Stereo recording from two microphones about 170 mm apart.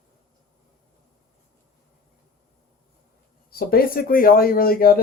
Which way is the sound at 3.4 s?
60° left (ahead or behind).